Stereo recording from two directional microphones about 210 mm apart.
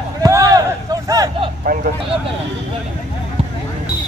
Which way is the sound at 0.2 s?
15° right (ahead or behind).